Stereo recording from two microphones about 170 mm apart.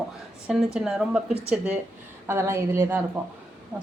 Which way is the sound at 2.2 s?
15° right (ahead or behind).